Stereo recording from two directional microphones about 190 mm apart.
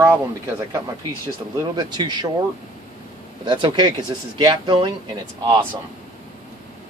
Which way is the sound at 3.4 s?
25° right (ahead or behind).